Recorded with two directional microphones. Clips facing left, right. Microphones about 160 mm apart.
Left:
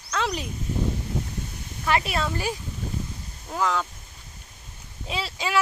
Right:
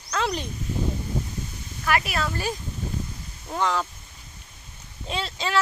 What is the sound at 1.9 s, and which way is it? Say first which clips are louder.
Speech: left 1 dB; 25° left (ahead or behind).